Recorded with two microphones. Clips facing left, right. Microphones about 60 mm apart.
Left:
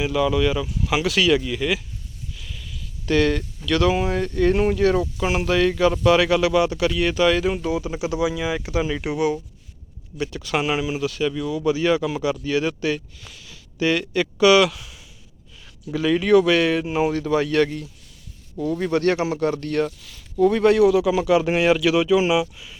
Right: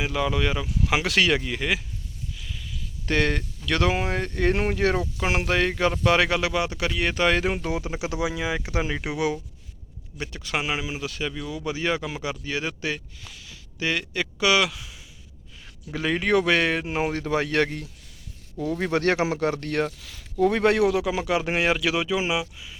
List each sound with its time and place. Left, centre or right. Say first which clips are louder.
0.0 s speech: left 5 dB; right
0.9 s speech: left 3 dB; right
2.4 s sheep: even; centre
3.1 s speech: left 5 dB; right
10.2 s speech: left 5 dB; right
11.0 s speech: left 7 dB; right
13.2 s speech: left 1 dB; centre
15.9 s speech: left 6 dB; right
17.2 s speech: left 2 dB; right
18.8 s speech: left 2 dB; right
20.4 s speech: left 4 dB; right
20.9 s speech: left 6 dB; right
22.5 s speech: left 1 dB; centre